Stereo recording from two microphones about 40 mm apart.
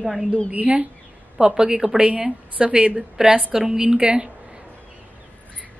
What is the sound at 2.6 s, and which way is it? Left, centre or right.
Speech, right.